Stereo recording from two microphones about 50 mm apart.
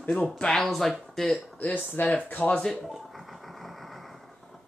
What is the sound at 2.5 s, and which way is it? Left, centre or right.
Speech, centre.